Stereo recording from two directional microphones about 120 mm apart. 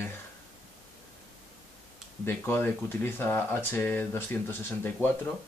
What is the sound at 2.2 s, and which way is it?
Speech, 20° left (ahead or behind).